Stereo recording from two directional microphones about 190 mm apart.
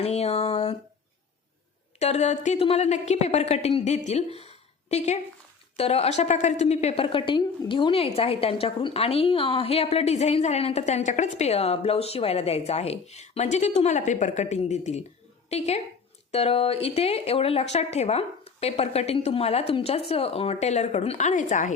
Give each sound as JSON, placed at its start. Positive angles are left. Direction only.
{"t": 0.0, "sound": "a woman's voice", "side_deg": 35}
{"t": 2.0, "sound": "a woman's voice", "side_deg": 35}